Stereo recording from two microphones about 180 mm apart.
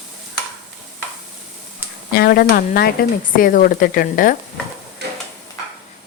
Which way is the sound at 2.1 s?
55° left (ahead or behind).